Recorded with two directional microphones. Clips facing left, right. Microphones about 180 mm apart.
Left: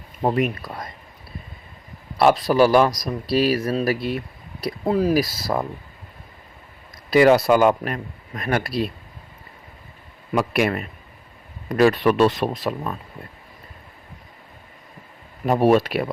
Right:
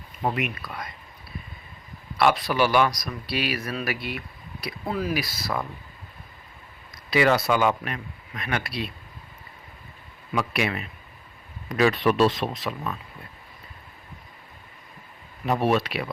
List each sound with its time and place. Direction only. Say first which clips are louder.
0.2 s speech: left 6 dB; 35° left (ahead or behind)
2.1 s speech: left 6 dB; 35° left (ahead or behind)
7.1 s speech: left 7 dB; 45° left (ahead or behind)
10.3 s speech: left 6 dB; 45° left (ahead or behind)
15.4 s speech: left 6 dB; 40° left (ahead or behind)